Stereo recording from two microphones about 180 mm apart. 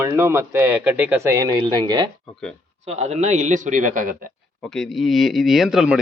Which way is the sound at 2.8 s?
35° right (ahead or behind).